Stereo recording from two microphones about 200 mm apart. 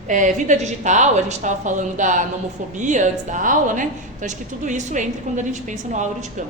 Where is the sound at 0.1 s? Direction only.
40° right (ahead or behind).